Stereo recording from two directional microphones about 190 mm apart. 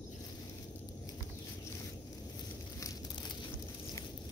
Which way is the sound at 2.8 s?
20° left (ahead or behind).